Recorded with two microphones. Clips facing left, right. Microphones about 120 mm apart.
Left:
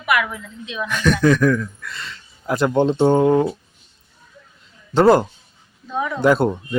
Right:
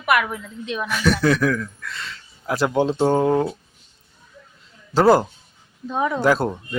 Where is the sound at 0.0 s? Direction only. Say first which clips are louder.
Right 1 dB; 45° right (ahead or behind).